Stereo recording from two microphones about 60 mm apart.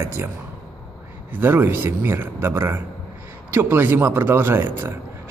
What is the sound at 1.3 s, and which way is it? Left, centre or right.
A man's voice, right.